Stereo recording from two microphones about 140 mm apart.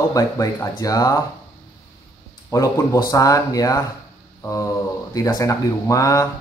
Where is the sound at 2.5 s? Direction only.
25° left (ahead or behind).